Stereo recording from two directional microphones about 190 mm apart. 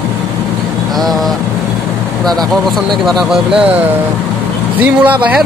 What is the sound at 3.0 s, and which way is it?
Speech, centre (ahead or behind).